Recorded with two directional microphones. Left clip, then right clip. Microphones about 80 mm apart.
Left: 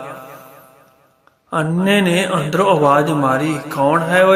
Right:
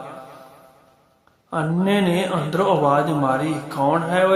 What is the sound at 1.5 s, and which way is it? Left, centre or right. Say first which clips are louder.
Speech: left 5 dB; left.